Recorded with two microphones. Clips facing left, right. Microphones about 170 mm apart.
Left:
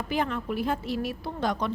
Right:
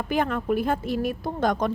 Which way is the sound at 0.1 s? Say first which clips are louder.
Right 5 dB; 50° right (ahead or behind).